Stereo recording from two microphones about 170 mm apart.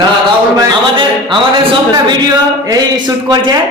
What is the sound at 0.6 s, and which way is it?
A man's voice, 30° right (ahead or behind).